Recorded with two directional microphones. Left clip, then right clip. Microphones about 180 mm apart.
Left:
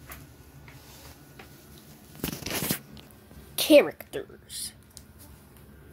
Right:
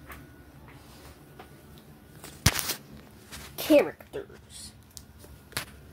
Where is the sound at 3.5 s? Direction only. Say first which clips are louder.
Left 3 dB; 15° left (ahead or behind).